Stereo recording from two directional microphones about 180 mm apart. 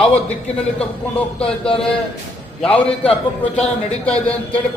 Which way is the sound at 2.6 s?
5° left (ahead or behind).